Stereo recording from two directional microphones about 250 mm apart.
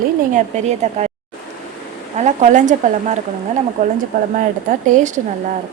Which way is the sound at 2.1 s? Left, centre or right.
Right.